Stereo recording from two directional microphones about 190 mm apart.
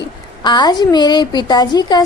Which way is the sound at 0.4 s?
20° left (ahead or behind).